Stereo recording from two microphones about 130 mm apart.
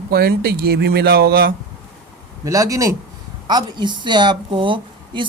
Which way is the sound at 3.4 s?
35° right (ahead or behind).